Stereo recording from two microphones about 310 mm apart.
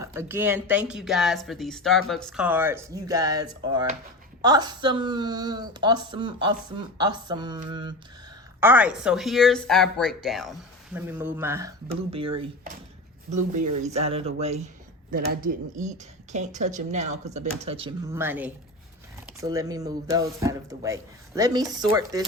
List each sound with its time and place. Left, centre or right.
0.0 s speech: centre